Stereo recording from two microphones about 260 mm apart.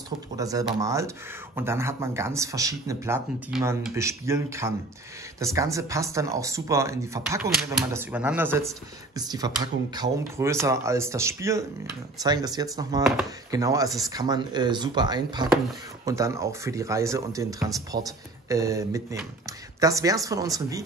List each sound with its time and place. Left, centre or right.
0.4 s speech: centre